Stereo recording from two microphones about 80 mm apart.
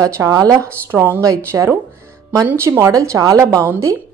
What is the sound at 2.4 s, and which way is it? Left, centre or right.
A woman's voice, right.